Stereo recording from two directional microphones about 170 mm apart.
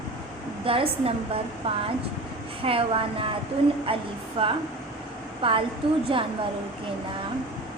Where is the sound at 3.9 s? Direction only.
30° right (ahead or behind).